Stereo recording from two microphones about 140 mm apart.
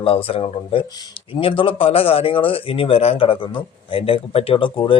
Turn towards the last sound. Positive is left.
turn(degrees=40)  # may be behind; listen again after turning